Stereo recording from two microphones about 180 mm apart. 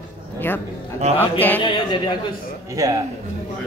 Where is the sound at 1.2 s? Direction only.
10° left (ahead or behind).